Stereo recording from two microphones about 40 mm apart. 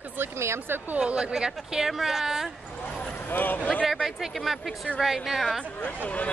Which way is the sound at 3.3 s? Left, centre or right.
Left.